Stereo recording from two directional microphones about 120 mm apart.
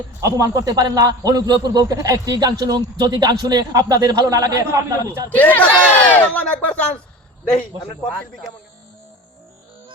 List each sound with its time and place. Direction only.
0.2 s a man's voice: 25° right (ahead or behind)
5.3 s speech: 15° left (ahead or behind)
8.1 s speech: centre (ahead or behind)